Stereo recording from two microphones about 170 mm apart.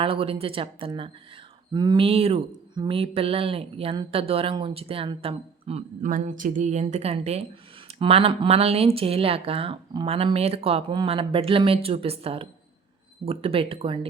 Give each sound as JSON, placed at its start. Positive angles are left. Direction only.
{"t": 0.0, "sound": "speech", "side_deg": -30}